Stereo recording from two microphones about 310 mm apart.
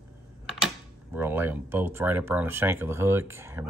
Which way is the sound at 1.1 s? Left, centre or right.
Centre.